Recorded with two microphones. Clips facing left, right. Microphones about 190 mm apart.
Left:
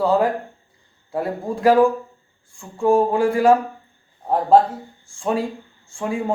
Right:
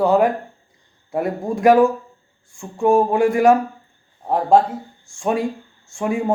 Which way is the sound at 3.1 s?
15° right (ahead or behind).